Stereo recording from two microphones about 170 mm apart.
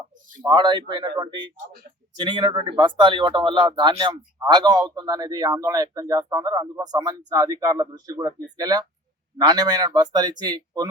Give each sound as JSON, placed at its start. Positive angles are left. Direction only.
{"t": 0.4, "sound": "speech", "side_deg": -25}